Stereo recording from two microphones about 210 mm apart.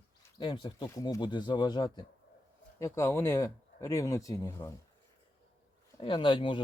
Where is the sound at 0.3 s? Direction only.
20° left (ahead or behind).